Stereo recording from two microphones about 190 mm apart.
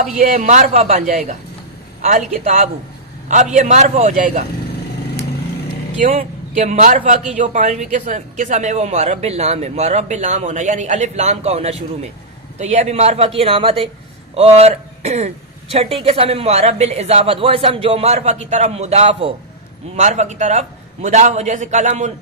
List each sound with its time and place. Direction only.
0.2 s speech: 35° right (ahead or behind)
6.0 s a man's voice: 35° right (ahead or behind)